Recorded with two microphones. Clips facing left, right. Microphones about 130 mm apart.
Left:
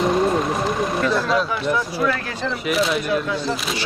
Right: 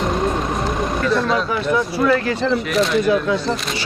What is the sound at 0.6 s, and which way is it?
Vehicle, centre (ahead or behind).